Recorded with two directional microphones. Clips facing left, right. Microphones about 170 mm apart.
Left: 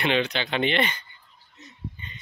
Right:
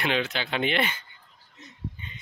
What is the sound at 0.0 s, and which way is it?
Speech, 5° right (ahead or behind).